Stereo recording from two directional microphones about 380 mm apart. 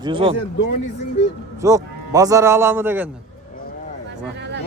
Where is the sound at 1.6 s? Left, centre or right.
Centre.